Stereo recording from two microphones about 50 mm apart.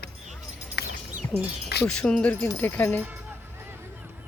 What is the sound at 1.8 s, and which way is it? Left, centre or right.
Speech, centre.